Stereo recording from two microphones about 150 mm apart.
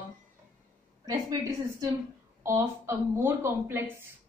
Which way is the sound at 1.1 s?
25° right (ahead or behind).